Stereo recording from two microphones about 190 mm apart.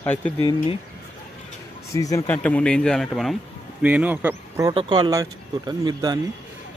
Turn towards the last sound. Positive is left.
turn(degrees=-20)  # may be behind; listen again after turning